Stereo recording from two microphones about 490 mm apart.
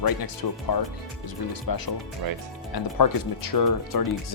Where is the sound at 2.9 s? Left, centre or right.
Left.